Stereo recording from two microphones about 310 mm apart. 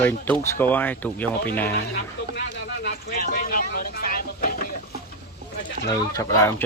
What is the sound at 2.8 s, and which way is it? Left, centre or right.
Speech, left.